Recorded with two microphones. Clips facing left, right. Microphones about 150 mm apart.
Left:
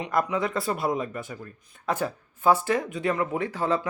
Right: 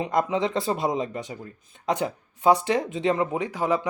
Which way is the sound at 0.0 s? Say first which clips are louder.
Right 2 dB; 25° right (ahead or behind).